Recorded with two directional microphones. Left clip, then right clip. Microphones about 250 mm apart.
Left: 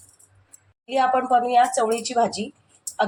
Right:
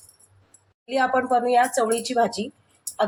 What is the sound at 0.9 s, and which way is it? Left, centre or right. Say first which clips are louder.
Speech: left 2 dB; centre.